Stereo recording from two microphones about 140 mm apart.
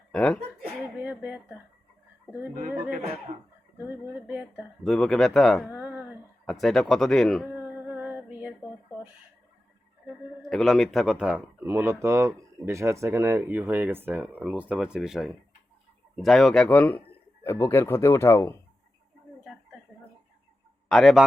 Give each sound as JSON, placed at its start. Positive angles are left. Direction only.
{"t": 0.1, "sound": "chuckle", "side_deg": 5}
{"t": 0.8, "sound": "a sound", "side_deg": -10}
{"t": 3.8, "sound": "speech", "side_deg": -10}
{"t": 4.5, "sound": "speech", "side_deg": 0}
{"t": 5.7, "sound": "a sound", "side_deg": -10}
{"t": 6.4, "sound": "speech", "side_deg": 0}
{"t": 7.7, "sound": "female singing", "side_deg": -10}
{"t": 10.4, "sound": "speech", "side_deg": 0}
{"t": 20.9, "sound": "speech", "side_deg": 0}